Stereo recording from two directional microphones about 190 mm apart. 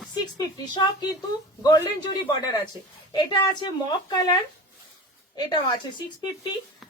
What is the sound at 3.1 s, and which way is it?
A woman's voice, 25° left (ahead or behind).